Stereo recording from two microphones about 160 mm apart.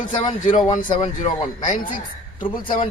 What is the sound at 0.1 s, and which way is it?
Speech, 30° left (ahead or behind).